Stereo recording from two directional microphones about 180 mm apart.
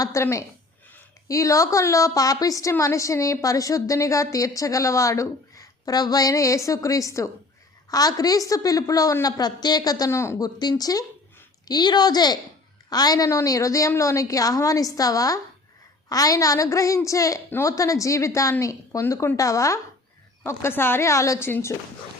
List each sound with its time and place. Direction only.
0.0 s a woman's voice: 15° left (ahead or behind)